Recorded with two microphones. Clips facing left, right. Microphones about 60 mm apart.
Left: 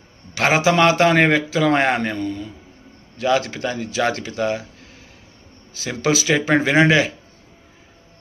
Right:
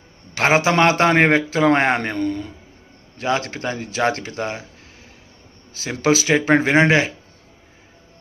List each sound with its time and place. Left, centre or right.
0.3 s speech: right
2.1 s a man's voice: right
3.2 s speech: right
5.7 s speech: right